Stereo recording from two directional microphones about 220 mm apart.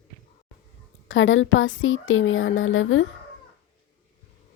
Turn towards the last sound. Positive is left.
turn(degrees=65)  # may be behind; listen again after turning